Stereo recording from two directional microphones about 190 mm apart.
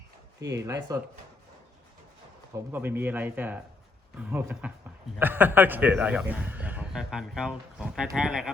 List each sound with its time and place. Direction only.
0.5 s a man's voice: 15° right (ahead or behind)
2.7 s a man's voice: 10° right (ahead or behind)